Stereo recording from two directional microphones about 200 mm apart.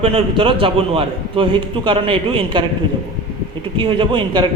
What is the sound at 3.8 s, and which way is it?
Speech, 25° right (ahead or behind).